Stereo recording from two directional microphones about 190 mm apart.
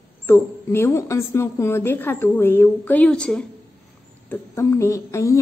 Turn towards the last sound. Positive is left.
turn(degrees=15)  # may be behind; listen again after turning